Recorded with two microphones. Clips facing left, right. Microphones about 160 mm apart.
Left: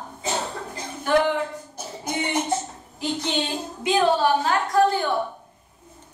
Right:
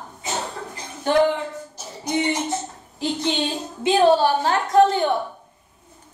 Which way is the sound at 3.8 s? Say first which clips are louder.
Right 4 dB; 30° right (ahead or behind).